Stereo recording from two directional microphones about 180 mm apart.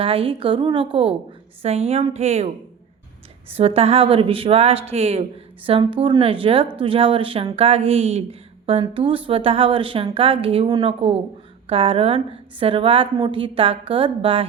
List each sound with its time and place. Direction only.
0.0 s a woman's voice: 30° right (ahead or behind)
3.5 s a woman's voice: 35° right (ahead or behind)